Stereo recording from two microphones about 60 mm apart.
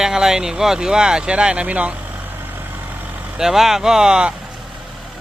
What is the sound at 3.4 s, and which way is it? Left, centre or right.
Speech, centre.